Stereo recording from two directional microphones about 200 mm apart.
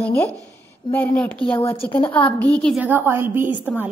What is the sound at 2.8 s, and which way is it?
A woman's voice, 10° right (ahead or behind).